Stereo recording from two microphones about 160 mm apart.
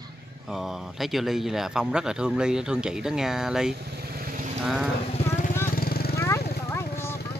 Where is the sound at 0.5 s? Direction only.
5° right (ahead or behind).